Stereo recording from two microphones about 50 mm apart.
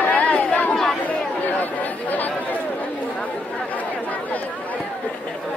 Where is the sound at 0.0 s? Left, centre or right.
Left.